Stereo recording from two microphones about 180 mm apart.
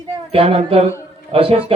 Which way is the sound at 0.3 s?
35° right (ahead or behind).